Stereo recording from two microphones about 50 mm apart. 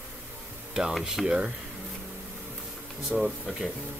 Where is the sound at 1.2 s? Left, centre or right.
Centre.